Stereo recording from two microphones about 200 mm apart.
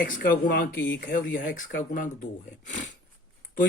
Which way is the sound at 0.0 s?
45° left (ahead or behind).